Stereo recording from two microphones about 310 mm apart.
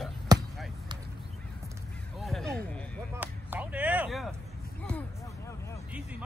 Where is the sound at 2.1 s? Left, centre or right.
Centre.